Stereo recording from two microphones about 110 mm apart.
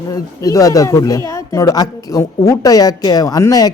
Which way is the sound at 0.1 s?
35° left (ahead or behind).